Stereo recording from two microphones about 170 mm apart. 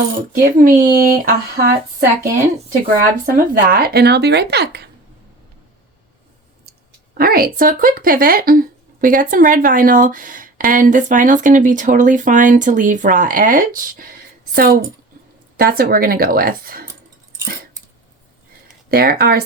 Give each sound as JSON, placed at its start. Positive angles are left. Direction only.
{"t": 0.3, "sound": "speech", "side_deg": -55}
{"t": 7.1, "sound": "speech", "side_deg": -60}
{"t": 18.9, "sound": "speech", "side_deg": -60}